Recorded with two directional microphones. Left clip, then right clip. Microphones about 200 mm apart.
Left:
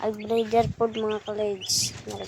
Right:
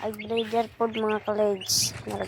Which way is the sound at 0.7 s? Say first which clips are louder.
Even; 10° left (ahead or behind).